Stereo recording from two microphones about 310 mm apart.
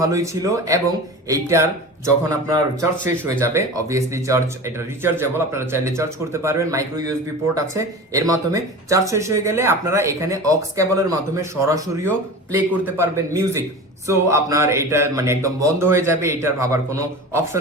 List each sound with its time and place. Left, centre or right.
0.0 s speech: centre